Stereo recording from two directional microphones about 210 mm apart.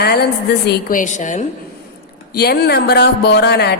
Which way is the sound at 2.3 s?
50° left (ahead or behind).